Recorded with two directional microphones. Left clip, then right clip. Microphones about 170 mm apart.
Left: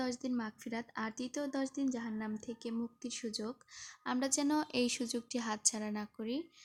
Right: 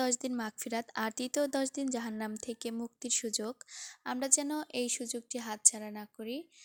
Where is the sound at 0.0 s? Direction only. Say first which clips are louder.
Right 5 dB; 35° right (ahead or behind).